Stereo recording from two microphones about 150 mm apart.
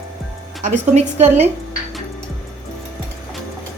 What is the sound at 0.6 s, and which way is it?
Speech, 50° right (ahead or behind).